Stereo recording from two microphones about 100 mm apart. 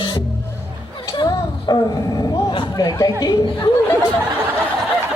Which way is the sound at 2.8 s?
35° left (ahead or behind).